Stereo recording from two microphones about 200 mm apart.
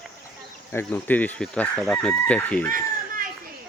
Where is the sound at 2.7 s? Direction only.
45° right (ahead or behind).